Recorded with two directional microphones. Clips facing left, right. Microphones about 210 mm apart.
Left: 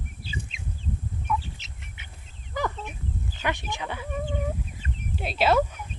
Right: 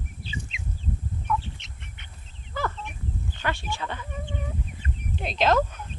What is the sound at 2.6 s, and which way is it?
Fowl, 15° left (ahead or behind).